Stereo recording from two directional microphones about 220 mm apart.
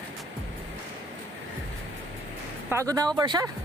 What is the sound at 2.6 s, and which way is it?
Speech, 15° right (ahead or behind).